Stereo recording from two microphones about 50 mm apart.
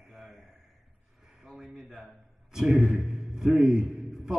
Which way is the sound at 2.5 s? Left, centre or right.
Centre.